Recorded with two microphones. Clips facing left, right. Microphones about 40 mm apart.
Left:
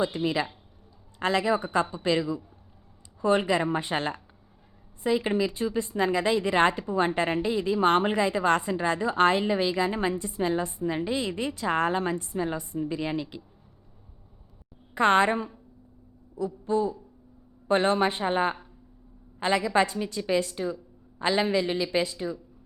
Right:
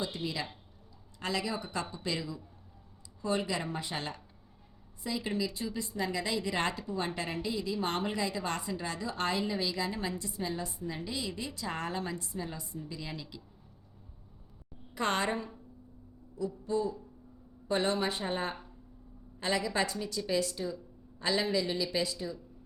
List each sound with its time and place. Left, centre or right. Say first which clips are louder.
0.0 s a woman's voice: left 9 dB; left
14.9 s a woman's voice: left 10 dB; left